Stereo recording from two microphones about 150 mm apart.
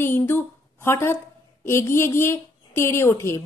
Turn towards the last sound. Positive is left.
turn(degrees=15)  # may be behind; listen again after turning